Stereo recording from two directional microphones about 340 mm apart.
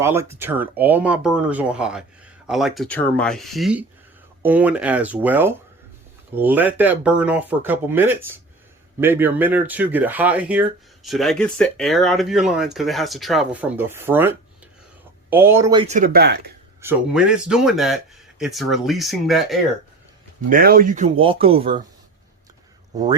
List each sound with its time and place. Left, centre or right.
0.0 s speech: centre; by 16.5 s right
16.8 s speech: centre
20.5 s speech: right